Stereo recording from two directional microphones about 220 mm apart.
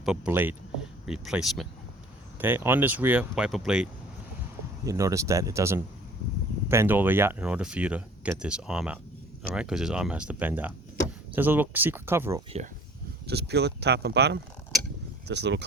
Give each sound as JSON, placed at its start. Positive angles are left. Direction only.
{"t": 0.0, "sound": "speech", "side_deg": -5}
{"t": 4.9, "sound": "speech", "side_deg": -15}
{"t": 13.2, "sound": "speech", "side_deg": -50}